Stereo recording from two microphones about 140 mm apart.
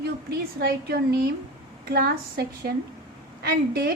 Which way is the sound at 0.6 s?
90° right.